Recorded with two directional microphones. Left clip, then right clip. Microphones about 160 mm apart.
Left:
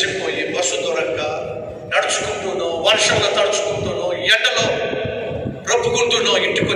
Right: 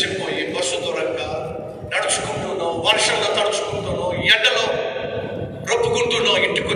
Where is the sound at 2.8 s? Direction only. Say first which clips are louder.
Left 3 dB; 40° right (ahead or behind).